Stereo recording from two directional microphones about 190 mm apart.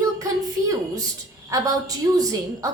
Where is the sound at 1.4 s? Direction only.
15° right (ahead or behind).